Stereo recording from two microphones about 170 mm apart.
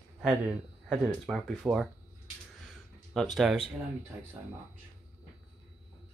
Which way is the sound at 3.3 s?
Centre (ahead or behind).